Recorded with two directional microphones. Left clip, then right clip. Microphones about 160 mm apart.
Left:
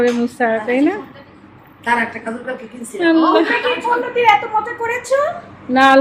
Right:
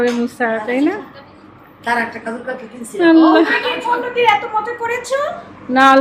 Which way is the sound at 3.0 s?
20° right (ahead or behind).